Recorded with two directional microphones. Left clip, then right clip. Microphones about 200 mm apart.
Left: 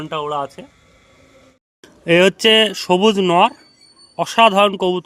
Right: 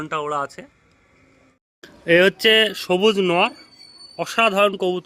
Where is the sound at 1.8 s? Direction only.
50° left (ahead or behind).